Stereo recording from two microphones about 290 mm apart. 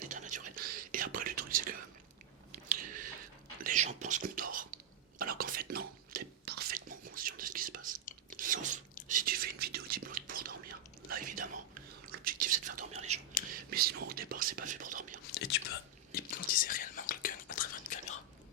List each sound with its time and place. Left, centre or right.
0.1 s whispering: right
2.6 s a sound: right
3.6 s whispering: right
8.4 s chewing: right
9.0 s whispering: right
15.3 s whispering: left